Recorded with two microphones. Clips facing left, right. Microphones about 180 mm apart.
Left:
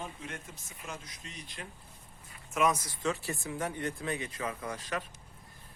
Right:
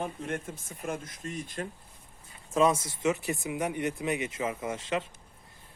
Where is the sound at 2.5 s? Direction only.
30° right (ahead or behind).